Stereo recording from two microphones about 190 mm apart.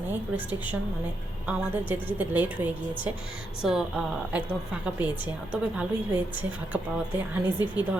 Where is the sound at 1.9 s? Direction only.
10° right (ahead or behind).